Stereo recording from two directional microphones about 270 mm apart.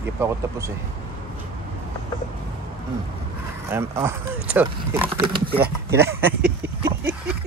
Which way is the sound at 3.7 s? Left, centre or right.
Centre.